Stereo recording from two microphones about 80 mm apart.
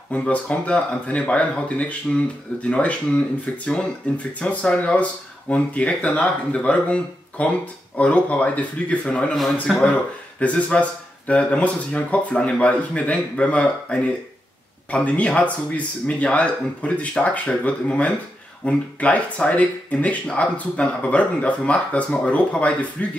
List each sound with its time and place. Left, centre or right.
0.1 s speech: centre
9.3 s a man's voice: centre
10.4 s speech: centre